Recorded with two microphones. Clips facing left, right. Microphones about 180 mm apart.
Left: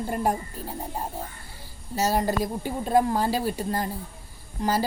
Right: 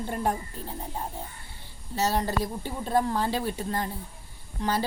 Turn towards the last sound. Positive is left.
turn(degrees=40)  # may be behind; listen again after turning